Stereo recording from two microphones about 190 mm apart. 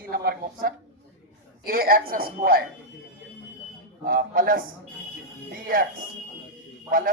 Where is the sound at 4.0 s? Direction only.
50° right (ahead or behind).